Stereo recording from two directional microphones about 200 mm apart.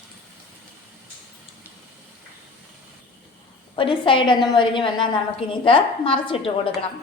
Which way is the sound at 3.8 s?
25° left (ahead or behind).